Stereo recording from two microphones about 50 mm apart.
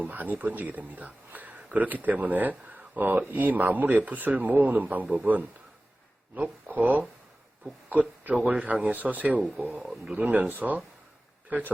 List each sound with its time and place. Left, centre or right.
0.0 s speech: right
7.6 s a sound: right
8.4 s speech: right